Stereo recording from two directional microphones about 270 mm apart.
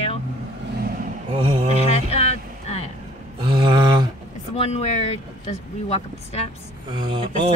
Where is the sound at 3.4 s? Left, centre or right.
Centre.